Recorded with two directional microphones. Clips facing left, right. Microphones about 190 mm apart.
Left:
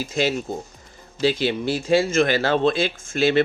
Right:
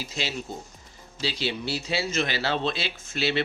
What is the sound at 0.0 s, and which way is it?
Speech, 50° left (ahead or behind).